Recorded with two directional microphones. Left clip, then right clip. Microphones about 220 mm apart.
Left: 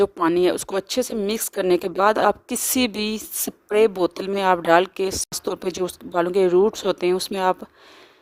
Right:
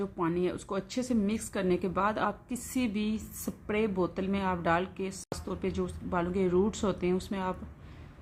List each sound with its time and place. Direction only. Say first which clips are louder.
0.0 s a woman's voice: left 13 dB; 50° left (ahead or behind)